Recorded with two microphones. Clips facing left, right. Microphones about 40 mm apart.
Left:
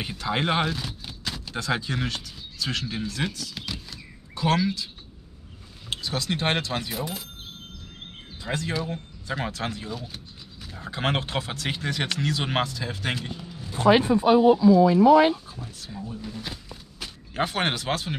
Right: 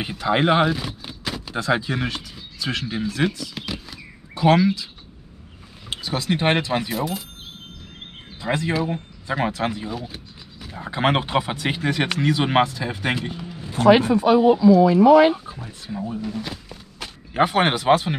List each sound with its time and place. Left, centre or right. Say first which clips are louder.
0.0 s speech: right 7 dB; centre
5.9 s speech: right 4 dB; centre
6.9 s speech: right 6 dB; centre
8.5 s speech: right 6 dB; centre
13.7 s speech: right 4 dB; right
14.5 s speech: right 3 dB; right
15.3 s speech: right 4 dB; right
15.9 s speech: right 9 dB; right
16.6 s a sound: right 3 dB; centre